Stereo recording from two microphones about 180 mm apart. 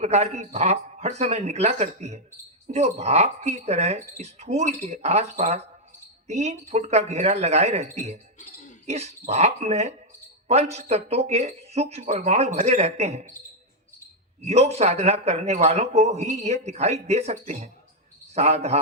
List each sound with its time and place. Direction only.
0.0 s a man's voice: 40° right (ahead or behind)
14.4 s a man's voice: 35° right (ahead or behind)